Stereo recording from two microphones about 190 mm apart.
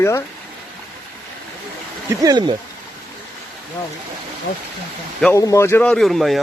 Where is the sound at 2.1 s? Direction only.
20° right (ahead or behind).